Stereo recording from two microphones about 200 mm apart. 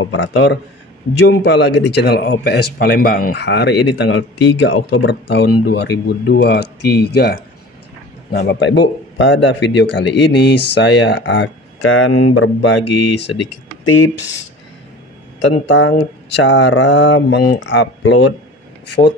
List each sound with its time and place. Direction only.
0.0 s speech: 80° left
1.2 s speech: 60° left (ahead or behind)
15.3 s speech: 65° left (ahead or behind)